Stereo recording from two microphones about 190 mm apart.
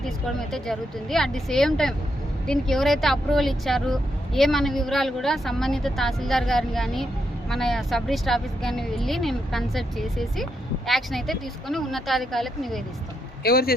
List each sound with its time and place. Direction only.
0.0 s speech: centre (ahead or behind)
13.4 s speech: 55° left (ahead or behind)